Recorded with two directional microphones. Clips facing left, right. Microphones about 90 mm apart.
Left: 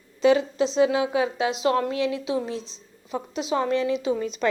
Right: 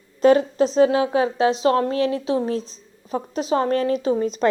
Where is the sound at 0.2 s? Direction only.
45° right (ahead or behind).